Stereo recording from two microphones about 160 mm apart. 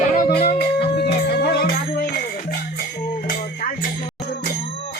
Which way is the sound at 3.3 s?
60° left (ahead or behind).